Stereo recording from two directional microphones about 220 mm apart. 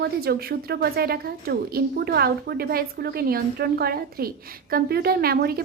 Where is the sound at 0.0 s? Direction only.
45° right (ahead or behind).